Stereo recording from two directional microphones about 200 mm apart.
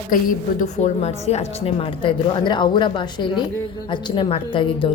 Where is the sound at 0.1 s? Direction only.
40° left (ahead or behind).